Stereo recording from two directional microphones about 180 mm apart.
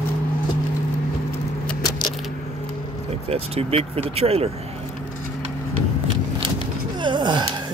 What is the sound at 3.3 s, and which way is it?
Speech, 35° right (ahead or behind).